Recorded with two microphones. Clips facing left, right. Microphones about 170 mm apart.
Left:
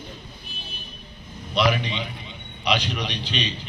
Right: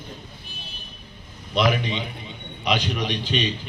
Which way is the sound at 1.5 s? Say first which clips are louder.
Right 1 dB; 45° right (ahead or behind).